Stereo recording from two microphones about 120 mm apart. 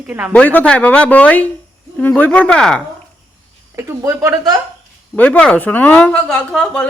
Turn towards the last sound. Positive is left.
turn(degrees=10)  # may be behind; listen again after turning